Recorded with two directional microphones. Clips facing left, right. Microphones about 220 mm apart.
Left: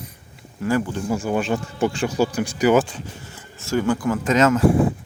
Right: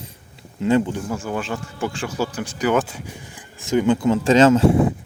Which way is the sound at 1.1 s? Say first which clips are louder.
Left 4 dB; 15° left (ahead or behind).